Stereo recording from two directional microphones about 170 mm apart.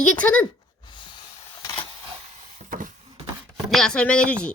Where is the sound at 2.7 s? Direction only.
50° right (ahead or behind).